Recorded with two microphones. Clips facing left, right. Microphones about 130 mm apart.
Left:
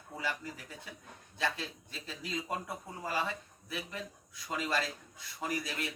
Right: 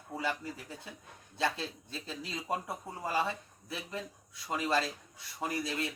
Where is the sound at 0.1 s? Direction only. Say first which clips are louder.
Right 3 dB; 25° right (ahead or behind).